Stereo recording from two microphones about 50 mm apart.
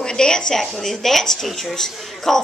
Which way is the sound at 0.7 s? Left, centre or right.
Centre.